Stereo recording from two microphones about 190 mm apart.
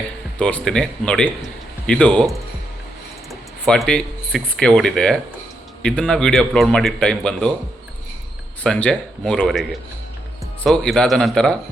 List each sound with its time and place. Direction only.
0.3 s a man's voice: 5° left (ahead or behind)
8.6 s a man's voice: 5° left (ahead or behind)